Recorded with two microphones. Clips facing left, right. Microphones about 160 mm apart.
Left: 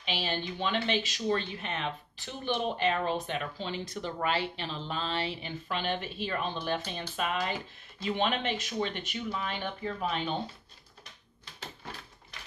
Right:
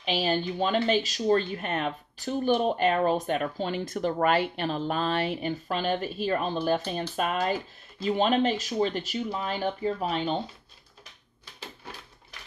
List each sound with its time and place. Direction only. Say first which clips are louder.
0.0 s speech: right 7 dB; 45° right (ahead or behind)